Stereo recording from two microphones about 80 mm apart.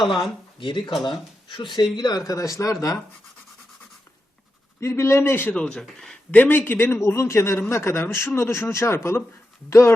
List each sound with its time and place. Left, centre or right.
0.0 s speech: centre
0.6 s speech: left
1.5 s speech: left
4.8 s a man's voice: left
5.8 s speech: centre
6.3 s a man's voice: left